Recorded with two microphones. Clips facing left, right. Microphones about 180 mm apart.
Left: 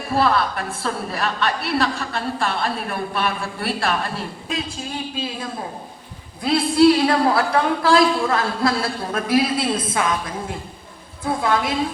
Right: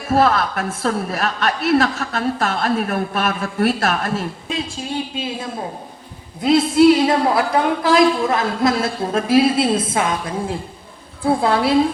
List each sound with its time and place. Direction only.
0.1 s a woman's voice: 45° right (ahead or behind)
6.4 s a woman's voice: 20° right (ahead or behind)